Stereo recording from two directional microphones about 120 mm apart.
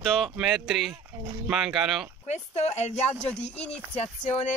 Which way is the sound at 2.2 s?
65° left (ahead or behind).